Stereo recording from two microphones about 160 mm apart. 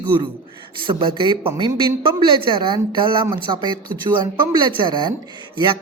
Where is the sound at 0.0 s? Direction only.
30° right (ahead or behind).